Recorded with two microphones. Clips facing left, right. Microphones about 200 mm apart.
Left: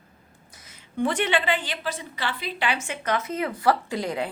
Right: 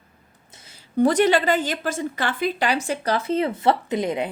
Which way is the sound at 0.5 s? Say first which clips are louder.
Right 8 dB; 30° right (ahead or behind).